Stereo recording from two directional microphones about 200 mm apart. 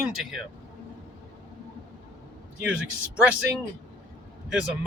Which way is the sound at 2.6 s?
5° right (ahead or behind).